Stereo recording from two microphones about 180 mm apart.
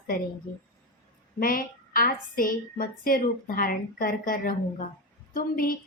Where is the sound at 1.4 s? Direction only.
50° left (ahead or behind).